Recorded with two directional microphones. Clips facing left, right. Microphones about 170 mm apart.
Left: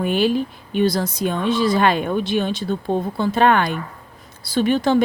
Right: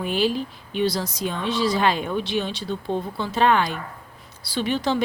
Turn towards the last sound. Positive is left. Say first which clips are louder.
# left 6 dB
turn(degrees=50)  # may be behind; listen again after turning